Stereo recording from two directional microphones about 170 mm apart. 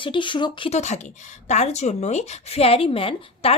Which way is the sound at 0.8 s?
45° left (ahead or behind).